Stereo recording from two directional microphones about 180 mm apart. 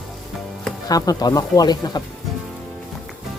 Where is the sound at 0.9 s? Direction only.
20° left (ahead or behind).